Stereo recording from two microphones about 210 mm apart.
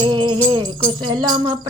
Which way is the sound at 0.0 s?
20° right (ahead or behind).